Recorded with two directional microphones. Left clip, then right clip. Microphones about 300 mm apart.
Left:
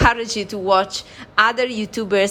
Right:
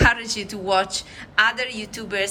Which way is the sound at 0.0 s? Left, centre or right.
Centre.